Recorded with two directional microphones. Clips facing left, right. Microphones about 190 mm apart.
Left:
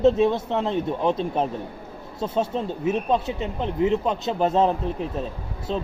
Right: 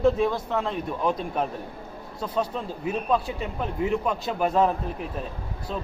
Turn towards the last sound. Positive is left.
turn(degrees=30)  # may be behind; listen again after turning